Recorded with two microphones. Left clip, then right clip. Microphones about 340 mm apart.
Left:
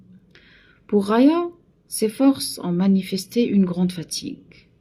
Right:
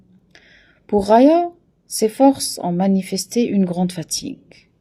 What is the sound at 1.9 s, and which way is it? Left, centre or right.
Speech, right.